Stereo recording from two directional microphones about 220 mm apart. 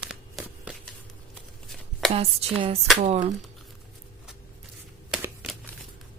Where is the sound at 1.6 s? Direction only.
Centre (ahead or behind).